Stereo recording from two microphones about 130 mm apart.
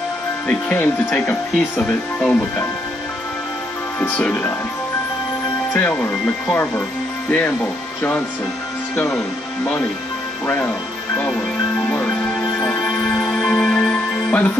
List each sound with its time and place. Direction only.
0.5 s speech: 10° left (ahead or behind)
4.0 s speech: 10° left (ahead or behind)
5.7 s speech: 15° left (ahead or behind)
8.9 s speech: 20° left (ahead or behind)
10.4 s speech: 15° left (ahead or behind)
12.5 s music: 5° left (ahead or behind)